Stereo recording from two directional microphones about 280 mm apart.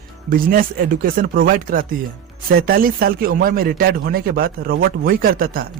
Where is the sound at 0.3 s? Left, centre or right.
Right.